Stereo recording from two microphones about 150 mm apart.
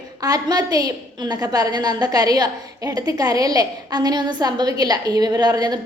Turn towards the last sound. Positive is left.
turn(degrees=-25)  # may be behind; listen again after turning